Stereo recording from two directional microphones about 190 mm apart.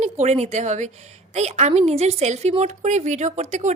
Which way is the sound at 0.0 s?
35° right (ahead or behind).